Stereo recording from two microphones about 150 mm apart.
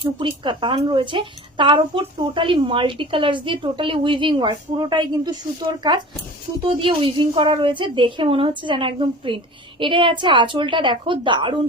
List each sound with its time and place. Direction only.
0.0 s speech: 35° right (ahead or behind)